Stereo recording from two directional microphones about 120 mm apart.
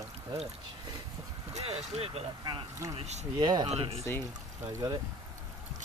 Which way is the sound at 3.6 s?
55° right (ahead or behind).